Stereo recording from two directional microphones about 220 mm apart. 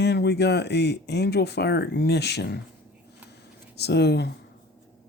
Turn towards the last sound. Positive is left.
turn(degrees=50)  # may be behind; listen again after turning